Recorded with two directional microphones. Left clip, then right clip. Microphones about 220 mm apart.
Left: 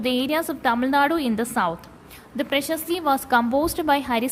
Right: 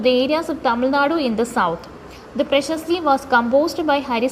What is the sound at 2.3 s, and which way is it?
A woman's voice, 25° left (ahead or behind).